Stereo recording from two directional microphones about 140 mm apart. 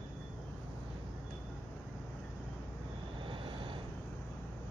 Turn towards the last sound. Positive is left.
turn(degrees=-35)  # may be behind; listen again after turning